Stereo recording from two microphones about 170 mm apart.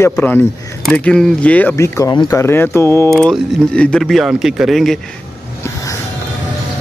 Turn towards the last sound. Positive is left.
turn(degrees=0)  # may be behind; listen again after turning